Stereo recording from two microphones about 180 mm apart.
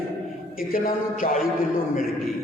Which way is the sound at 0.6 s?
50° left (ahead or behind).